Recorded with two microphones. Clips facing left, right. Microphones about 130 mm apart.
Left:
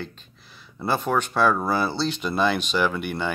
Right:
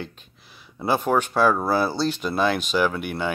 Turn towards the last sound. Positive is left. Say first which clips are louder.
# right 1 dB
turn(degrees=-5)  # may be behind; listen again after turning